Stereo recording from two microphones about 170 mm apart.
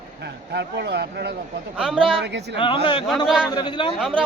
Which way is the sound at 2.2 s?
90° right.